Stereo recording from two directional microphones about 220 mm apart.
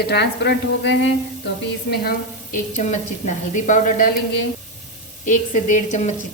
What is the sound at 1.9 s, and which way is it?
A woman's voice, 40° left (ahead or behind).